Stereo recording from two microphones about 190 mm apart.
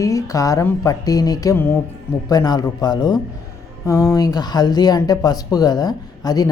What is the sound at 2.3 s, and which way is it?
Speech, 20° left (ahead or behind).